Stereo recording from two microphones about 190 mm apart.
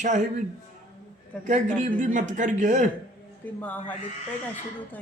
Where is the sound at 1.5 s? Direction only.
40° right (ahead or behind).